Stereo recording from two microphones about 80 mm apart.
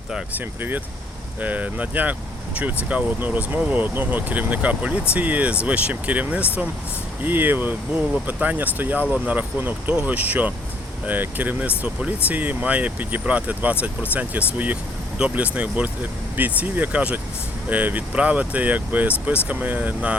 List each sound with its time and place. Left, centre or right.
0.3 s speech: right